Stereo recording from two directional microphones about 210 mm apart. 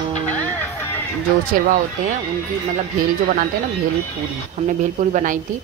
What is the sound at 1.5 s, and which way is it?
Speech, 40° right (ahead or behind).